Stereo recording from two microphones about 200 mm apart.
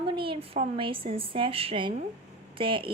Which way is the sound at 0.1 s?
25° right (ahead or behind).